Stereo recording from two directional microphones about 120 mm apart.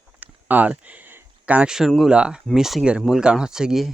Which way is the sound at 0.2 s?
15° right (ahead or behind).